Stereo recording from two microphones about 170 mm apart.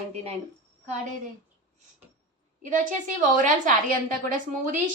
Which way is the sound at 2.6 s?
50° right (ahead or behind).